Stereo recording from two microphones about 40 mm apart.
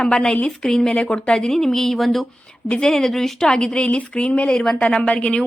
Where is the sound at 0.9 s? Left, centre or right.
Left.